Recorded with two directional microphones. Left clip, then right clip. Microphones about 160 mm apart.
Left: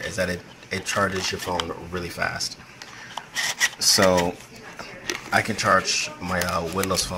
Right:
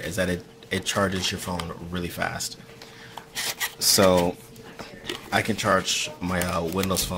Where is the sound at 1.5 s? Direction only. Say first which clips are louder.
Left 5 dB; 15° left (ahead or behind).